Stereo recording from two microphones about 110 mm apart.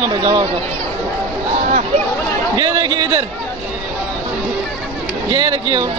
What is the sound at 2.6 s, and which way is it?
Speech, 40° right (ahead or behind).